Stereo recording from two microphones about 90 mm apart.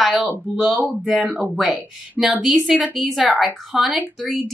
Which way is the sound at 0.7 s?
20° right (ahead or behind).